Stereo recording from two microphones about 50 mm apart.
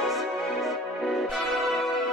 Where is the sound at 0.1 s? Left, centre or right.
Centre.